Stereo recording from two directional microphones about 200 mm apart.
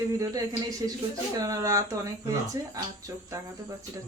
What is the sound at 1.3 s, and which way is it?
Speech, 15° right (ahead or behind).